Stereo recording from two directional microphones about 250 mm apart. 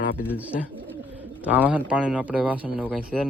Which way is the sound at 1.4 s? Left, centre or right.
Centre.